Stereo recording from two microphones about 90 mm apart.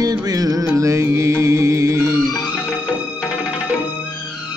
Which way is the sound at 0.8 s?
35° right (ahead or behind).